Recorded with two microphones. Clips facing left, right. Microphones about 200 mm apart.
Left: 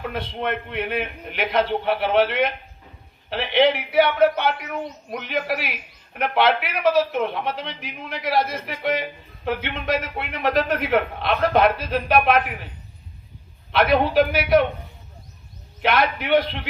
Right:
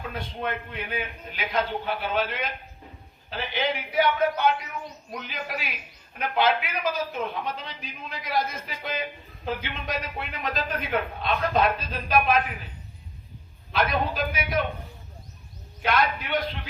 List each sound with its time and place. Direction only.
0.0 s a man's voice: 70° left (ahead or behind)
13.7 s a man's voice: 65° left (ahead or behind)
15.8 s a man's voice: 70° left (ahead or behind)